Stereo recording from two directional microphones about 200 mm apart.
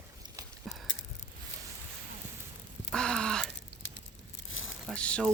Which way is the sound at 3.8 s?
70° left (ahead or behind).